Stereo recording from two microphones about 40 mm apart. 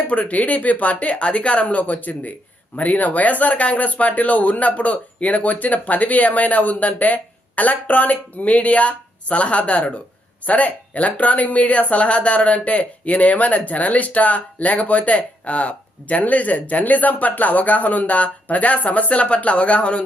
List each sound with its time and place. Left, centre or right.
0.1 s speech: left